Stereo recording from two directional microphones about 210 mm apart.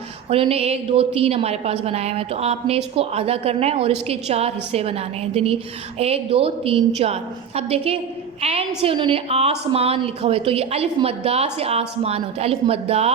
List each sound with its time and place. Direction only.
0.3 s a woman's voice: 25° right (ahead or behind)